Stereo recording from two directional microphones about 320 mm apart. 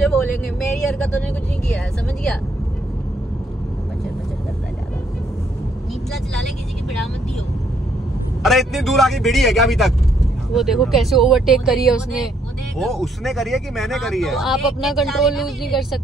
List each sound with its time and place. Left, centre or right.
0.0 s vehicle: centre
8.4 s speech: centre